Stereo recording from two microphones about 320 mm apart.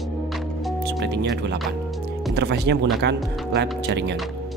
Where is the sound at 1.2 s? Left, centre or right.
Right.